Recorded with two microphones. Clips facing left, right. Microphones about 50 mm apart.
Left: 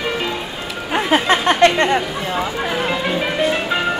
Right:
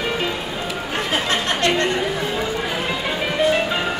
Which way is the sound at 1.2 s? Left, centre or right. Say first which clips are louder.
Left 8 dB; left.